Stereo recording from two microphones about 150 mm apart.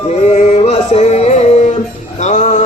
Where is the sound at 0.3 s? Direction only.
45° left (ahead or behind).